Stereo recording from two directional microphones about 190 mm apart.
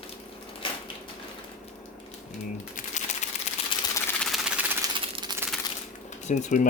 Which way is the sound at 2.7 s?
40° left (ahead or behind).